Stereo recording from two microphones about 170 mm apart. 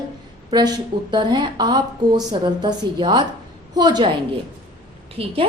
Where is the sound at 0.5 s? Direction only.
25° right (ahead or behind).